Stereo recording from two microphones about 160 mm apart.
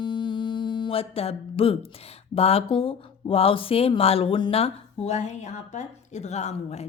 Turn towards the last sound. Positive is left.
turn(degrees=45)  # may be behind; listen again after turning